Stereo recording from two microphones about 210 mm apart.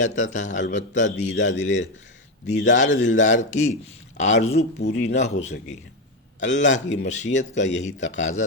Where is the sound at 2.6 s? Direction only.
35° left (ahead or behind).